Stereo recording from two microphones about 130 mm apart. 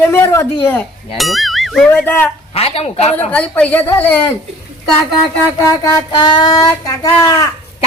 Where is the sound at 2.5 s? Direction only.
50° left (ahead or behind).